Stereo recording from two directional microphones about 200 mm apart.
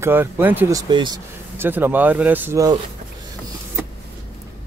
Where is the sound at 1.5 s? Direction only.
10° right (ahead or behind).